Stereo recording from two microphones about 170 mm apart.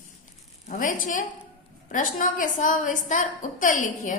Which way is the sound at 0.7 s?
55° left (ahead or behind).